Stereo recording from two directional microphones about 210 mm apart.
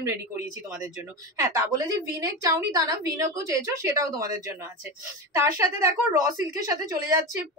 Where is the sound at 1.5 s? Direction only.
15° right (ahead or behind).